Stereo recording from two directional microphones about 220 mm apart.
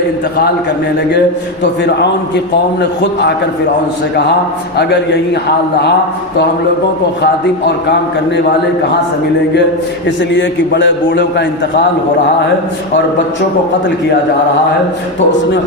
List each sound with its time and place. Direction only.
1.8 s a man's voice: 50° left (ahead or behind)
4.8 s a man's voice: 50° left (ahead or behind)
10.3 s a man's voice: 55° left (ahead or behind)